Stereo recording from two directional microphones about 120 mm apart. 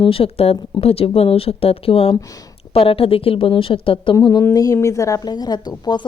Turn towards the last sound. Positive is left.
turn(degrees=35)  # may be behind; listen again after turning